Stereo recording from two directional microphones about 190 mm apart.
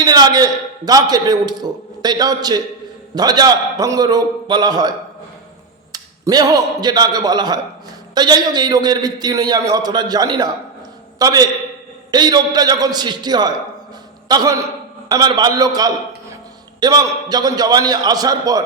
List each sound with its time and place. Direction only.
0.0 s a man's voice: 20° right (ahead or behind)